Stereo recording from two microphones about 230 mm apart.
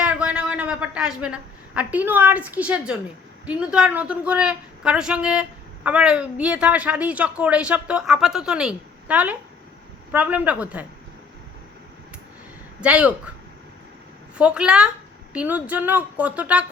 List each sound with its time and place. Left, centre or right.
0.0 s a man's voice: centre
12.8 s a woman's voice: centre
14.3 s a woman's voice: centre